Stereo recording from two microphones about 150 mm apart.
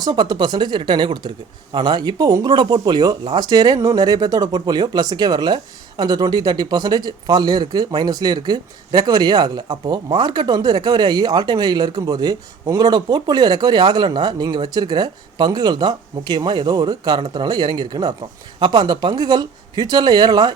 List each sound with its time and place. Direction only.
0.0 s speech: 25° right (ahead or behind)